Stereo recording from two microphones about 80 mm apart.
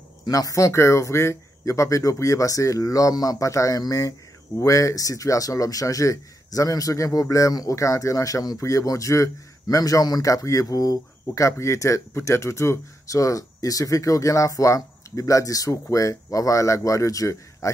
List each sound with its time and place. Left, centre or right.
0.3 s a man's voice: left